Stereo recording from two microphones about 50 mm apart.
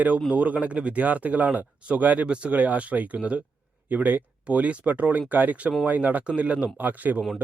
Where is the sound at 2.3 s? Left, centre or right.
Right.